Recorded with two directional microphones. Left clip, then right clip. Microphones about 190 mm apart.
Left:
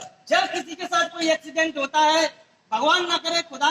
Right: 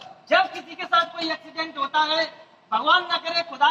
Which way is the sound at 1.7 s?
45° left (ahead or behind).